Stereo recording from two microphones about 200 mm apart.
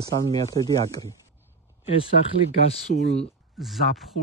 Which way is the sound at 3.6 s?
Centre (ahead or behind).